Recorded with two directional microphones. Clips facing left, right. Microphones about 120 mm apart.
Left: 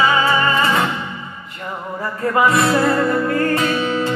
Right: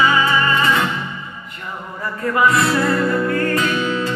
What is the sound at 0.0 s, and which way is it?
Music, 30° left (ahead or behind).